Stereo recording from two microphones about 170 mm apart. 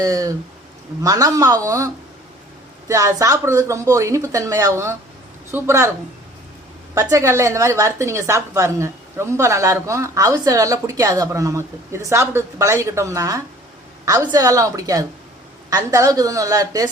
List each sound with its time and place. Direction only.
0.0 s a woman's voice: 20° right (ahead or behind)
6.9 s a woman's voice: 20° right (ahead or behind)